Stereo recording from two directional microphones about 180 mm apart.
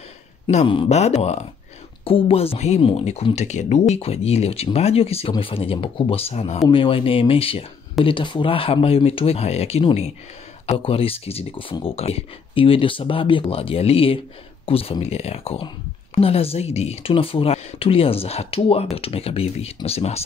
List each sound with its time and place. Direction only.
0.5 s speech: 35° left (ahead or behind)